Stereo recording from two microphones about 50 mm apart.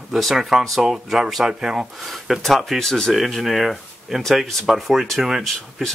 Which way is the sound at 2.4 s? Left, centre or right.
Centre.